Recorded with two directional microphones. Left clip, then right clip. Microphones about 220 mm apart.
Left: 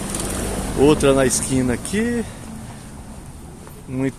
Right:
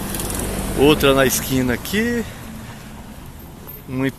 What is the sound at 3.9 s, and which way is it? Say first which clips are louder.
Speech: right 1 dB; centre (ahead or behind).